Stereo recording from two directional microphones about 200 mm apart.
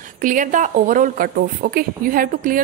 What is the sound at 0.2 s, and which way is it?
A woman's voice, 40° right (ahead or behind).